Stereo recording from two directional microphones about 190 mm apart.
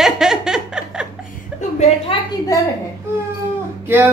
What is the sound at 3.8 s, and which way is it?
Music, 10° right (ahead or behind).